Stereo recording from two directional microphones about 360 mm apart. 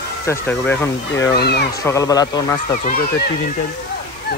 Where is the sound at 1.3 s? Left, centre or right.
Left.